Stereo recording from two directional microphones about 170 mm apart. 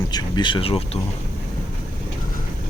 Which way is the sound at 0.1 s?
25° left (ahead or behind).